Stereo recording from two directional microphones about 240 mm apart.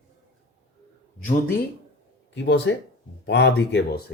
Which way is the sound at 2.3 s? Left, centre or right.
Left.